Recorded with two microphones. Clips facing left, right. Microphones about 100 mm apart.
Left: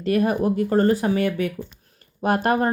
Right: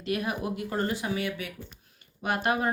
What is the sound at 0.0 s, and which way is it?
Speech, 45° left (ahead or behind).